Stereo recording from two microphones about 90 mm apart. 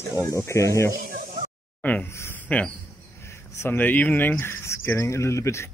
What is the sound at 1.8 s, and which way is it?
Speech, 15° left (ahead or behind).